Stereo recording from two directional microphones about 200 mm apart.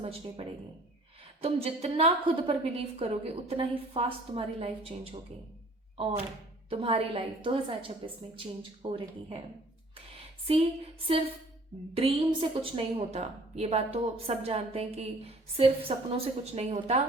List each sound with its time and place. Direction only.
0.0 s a woman's voice: 30° right (ahead or behind)
6.7 s a woman's voice: 30° right (ahead or behind)
10.2 s a sound: 30° right (ahead or behind)
11.9 s a woman's voice: 25° right (ahead or behind)